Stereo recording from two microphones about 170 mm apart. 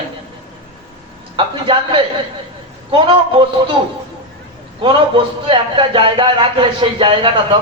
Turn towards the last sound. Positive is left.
turn(degrees=-30)  # may be behind; listen again after turning